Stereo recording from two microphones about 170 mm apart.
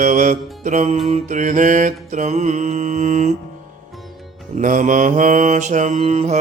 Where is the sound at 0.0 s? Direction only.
45° right (ahead or behind).